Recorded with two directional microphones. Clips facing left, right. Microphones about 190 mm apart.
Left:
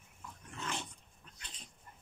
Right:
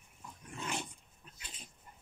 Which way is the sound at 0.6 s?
10° right (ahead or behind).